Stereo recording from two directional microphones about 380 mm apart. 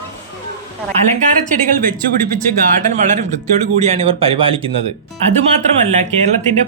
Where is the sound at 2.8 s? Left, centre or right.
Centre.